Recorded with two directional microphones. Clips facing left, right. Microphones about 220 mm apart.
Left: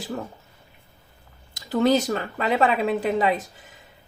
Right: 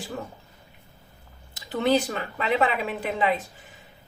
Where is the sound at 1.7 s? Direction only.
40° left (ahead or behind).